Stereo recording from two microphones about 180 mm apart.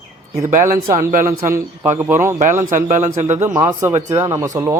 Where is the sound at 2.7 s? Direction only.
45° right (ahead or behind).